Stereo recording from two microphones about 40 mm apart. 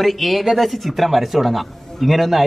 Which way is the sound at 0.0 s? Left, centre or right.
Centre.